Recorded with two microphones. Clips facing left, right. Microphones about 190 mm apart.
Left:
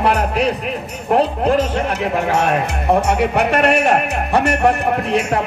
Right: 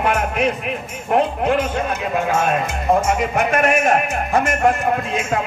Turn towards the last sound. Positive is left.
turn(degrees=70)  # may be behind; listen again after turning